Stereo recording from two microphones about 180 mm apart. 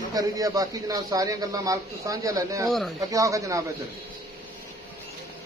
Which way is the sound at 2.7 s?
Centre (ahead or behind).